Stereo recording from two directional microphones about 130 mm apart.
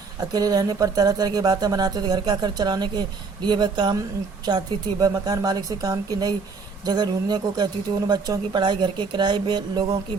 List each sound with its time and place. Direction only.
0.3 s a woman's voice: 30° right (ahead or behind)